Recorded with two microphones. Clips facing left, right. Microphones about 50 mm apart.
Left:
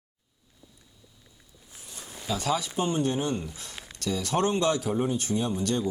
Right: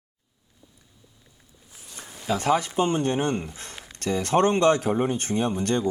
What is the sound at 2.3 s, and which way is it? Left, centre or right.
Speech, right.